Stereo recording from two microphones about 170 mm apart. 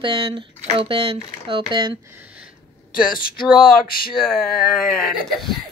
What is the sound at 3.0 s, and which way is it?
Speech, 60° left (ahead or behind).